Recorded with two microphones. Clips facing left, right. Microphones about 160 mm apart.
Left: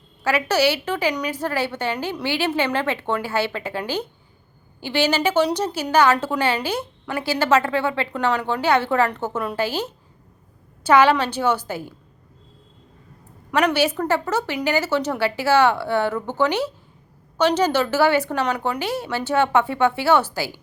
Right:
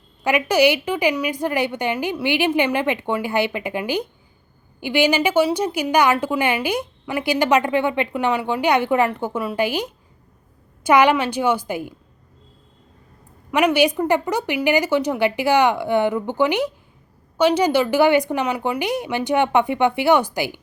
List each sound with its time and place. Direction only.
0.3 s a woman's voice: 15° right (ahead or behind)
13.5 s a woman's voice: 10° right (ahead or behind)